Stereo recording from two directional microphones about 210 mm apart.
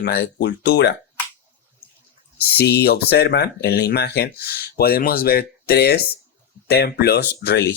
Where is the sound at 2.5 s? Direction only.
50° left (ahead or behind).